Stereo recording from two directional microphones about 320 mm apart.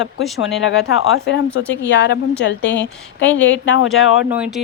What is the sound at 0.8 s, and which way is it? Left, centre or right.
A woman's voice, left.